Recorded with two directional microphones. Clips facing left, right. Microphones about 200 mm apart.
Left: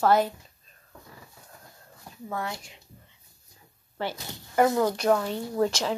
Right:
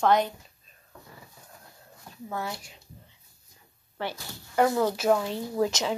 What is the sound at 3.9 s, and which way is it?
Speech, 15° left (ahead or behind).